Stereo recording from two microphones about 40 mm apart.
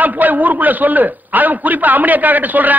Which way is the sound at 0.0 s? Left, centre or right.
Right.